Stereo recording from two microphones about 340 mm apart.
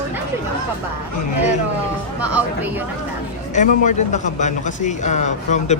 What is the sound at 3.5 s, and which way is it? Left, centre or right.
A man's voice, left.